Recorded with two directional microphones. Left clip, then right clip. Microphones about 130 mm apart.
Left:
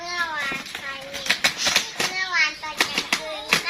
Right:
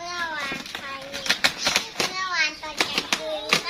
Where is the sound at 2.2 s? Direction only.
15° right (ahead or behind).